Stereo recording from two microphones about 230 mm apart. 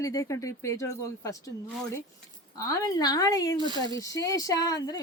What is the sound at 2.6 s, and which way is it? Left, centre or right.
Speech, centre.